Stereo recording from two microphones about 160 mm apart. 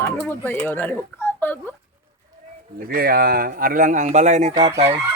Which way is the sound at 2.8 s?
70° right (ahead or behind).